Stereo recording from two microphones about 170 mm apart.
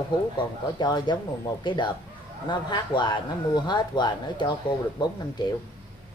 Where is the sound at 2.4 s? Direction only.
25° left (ahead or behind).